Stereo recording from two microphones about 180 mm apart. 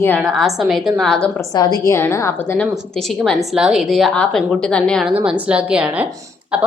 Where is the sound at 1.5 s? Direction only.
20° left (ahead or behind).